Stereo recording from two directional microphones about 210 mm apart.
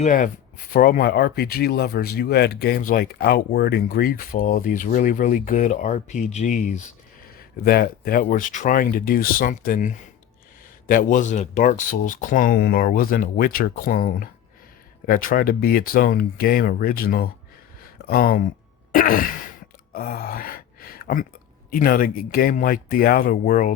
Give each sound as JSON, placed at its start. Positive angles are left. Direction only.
{"t": 0.0, "sound": "speech", "side_deg": 40}
{"t": 7.6, "sound": "speech", "side_deg": 45}
{"t": 18.9, "sound": "throat clearing", "side_deg": 45}
{"t": 19.9, "sound": "gasp", "side_deg": 45}
{"t": 21.7, "sound": "speech", "side_deg": 45}